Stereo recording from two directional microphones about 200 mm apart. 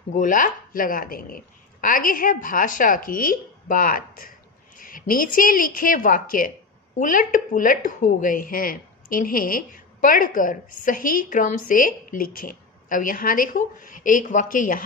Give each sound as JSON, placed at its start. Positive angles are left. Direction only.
{"t": 0.1, "sound": "speech", "side_deg": 40}